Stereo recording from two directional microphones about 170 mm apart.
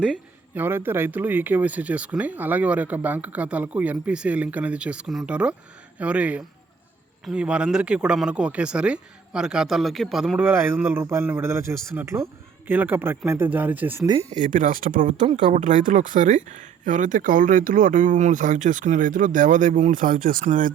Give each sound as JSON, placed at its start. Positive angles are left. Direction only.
{"t": 0.0, "sound": "speech", "side_deg": -10}
{"t": 10.4, "sound": "speech", "side_deg": -10}
{"t": 14.1, "sound": "speech", "side_deg": -35}